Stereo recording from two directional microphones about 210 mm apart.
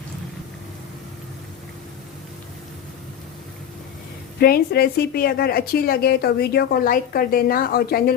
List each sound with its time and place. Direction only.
4.4 s a woman's voice: 45° left (ahead or behind)